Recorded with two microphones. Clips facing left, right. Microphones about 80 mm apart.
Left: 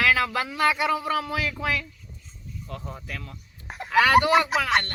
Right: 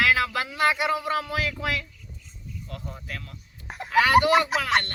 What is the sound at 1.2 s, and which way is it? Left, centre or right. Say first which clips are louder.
Speech: even; left.